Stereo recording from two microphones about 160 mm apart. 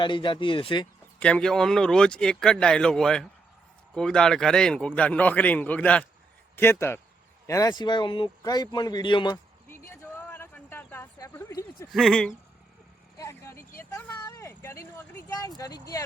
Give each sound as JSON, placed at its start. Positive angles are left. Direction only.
{"t": 0.0, "sound": "speech", "side_deg": 30}
{"t": 1.2, "sound": "a man's voice", "side_deg": 5}
{"t": 10.2, "sound": "a sound", "side_deg": 10}
{"t": 11.9, "sound": "speech", "side_deg": 0}
{"t": 13.1, "sound": "vehicle", "side_deg": 20}
{"t": 14.2, "sound": "a sound", "side_deg": 20}